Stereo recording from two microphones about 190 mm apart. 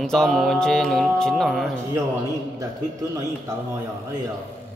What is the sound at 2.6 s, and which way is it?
Speech, 15° right (ahead or behind).